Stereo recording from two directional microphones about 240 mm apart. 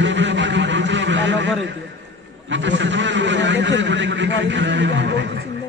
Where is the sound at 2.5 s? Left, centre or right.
Right.